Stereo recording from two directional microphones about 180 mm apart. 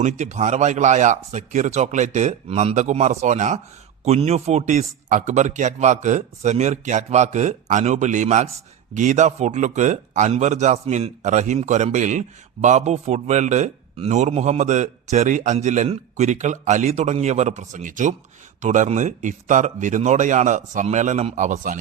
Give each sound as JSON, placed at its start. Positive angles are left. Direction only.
{"t": 0.0, "sound": "a man's voice", "side_deg": -40}